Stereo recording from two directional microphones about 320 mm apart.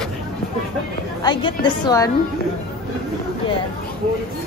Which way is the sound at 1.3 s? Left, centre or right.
Centre.